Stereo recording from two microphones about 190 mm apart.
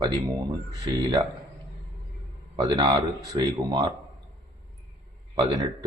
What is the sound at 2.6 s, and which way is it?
A man's voice, 20° right (ahead or behind).